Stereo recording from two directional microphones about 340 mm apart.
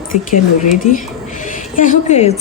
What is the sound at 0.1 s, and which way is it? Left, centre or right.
Speech, left.